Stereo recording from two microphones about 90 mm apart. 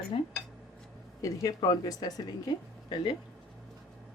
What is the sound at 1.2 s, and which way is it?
Speech, 40° left (ahead or behind).